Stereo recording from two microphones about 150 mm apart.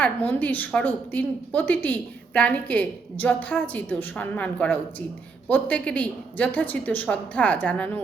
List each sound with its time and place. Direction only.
0.0 s a woman's voice: 10° left (ahead or behind)